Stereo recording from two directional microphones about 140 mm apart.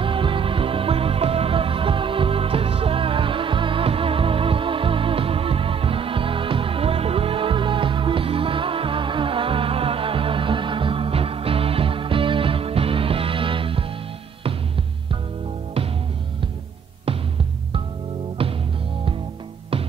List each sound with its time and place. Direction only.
0.0 s music: 40° right (ahead or behind)
18.4 s music: 40° right (ahead or behind)